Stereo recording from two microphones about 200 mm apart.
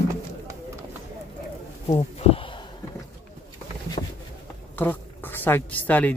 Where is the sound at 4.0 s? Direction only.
35° left (ahead or behind).